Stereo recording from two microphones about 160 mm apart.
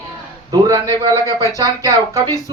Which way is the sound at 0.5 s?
25° right (ahead or behind).